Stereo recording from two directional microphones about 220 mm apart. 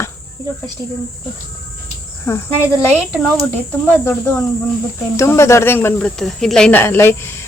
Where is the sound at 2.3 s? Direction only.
15° left (ahead or behind).